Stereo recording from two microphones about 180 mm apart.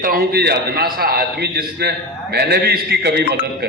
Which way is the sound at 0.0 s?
55° right (ahead or behind).